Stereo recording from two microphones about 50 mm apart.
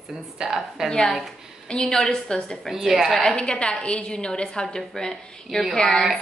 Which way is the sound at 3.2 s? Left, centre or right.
Centre.